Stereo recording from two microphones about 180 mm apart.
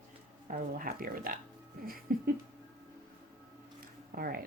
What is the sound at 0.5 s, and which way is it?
A woman's voice, 50° right (ahead or behind).